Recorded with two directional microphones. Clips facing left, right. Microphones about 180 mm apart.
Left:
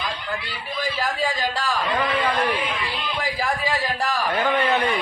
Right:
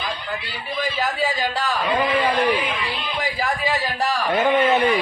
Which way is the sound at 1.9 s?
20° right (ahead or behind).